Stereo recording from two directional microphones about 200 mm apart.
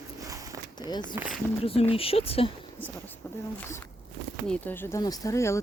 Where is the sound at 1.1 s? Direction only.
10° right (ahead or behind).